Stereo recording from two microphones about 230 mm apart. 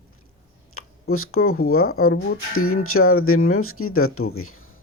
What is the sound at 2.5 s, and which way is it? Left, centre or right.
Speech, left.